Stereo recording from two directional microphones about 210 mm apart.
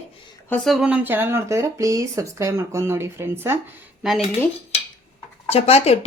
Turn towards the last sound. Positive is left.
turn(degrees=30)  # may be behind; listen again after turning